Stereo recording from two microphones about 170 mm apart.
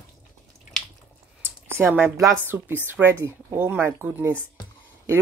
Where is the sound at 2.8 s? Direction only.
10° right (ahead or behind).